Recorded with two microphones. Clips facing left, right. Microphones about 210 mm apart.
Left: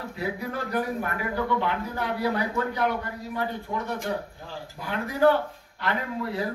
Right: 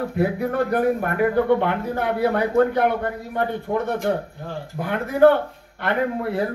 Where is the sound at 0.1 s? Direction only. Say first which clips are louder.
Right 6 dB; 55° right (ahead or behind).